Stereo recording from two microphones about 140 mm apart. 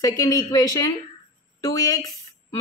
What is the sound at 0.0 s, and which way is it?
Speech, 25° left (ahead or behind).